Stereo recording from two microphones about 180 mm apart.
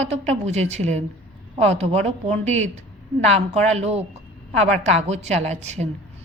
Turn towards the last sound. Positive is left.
turn(degrees=-40)  # may be behind; listen again after turning